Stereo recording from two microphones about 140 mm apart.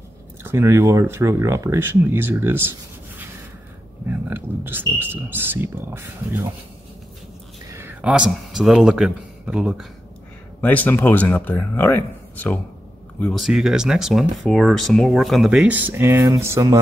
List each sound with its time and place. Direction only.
0.4 s speech: 20° right (ahead or behind)
4.3 s speech: 15° right (ahead or behind)
7.7 s speech: 15° right (ahead or behind)
10.6 s speech: 10° left (ahead or behind)
13.3 s speech: 5° right (ahead or behind)
16.3 s mantra: 20° right (ahead or behind)